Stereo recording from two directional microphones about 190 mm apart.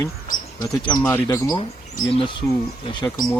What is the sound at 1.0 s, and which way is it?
Speech, 10° left (ahead or behind).